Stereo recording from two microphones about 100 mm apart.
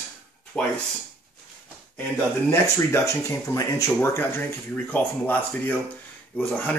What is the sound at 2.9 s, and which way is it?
Speech, 30° left (ahead or behind).